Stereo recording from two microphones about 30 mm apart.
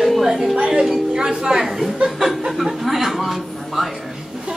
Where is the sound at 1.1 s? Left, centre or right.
Right.